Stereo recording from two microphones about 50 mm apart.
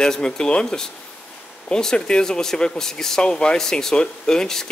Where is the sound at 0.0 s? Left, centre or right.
Centre.